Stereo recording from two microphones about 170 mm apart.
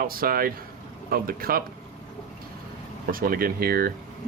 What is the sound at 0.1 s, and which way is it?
Speech, 60° right (ahead or behind).